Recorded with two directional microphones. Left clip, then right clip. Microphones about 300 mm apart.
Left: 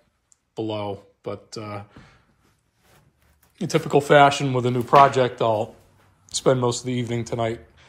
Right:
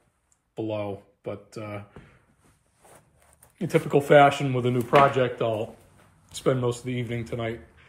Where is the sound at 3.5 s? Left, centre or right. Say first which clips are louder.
Left 2 dB; centre.